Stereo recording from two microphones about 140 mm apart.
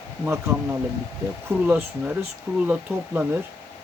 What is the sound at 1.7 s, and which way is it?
Speech, 10° right (ahead or behind).